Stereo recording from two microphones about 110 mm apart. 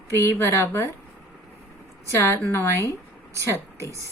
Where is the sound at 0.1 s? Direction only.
25° left (ahead or behind).